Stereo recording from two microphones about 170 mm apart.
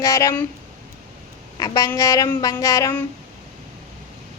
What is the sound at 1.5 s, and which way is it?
A woman's voice, 20° left (ahead or behind).